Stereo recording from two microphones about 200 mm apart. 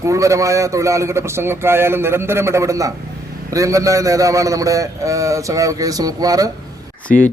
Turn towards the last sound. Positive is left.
turn(degrees=5)  # may be behind; listen again after turning